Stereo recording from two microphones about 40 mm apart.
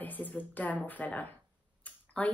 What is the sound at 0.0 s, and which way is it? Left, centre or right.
A woman's voice, left.